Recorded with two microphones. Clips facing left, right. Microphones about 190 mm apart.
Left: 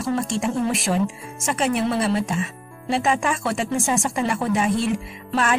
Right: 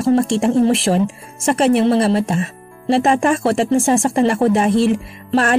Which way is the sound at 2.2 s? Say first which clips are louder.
Right 5 dB; 50° right (ahead or behind).